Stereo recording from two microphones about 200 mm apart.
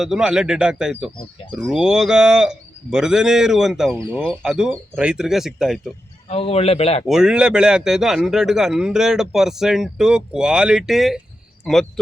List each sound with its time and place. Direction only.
0.0 s speech: 5° right (ahead or behind)
6.2 s speech: 30° left (ahead or behind)
7.1 s speech: 5° right (ahead or behind)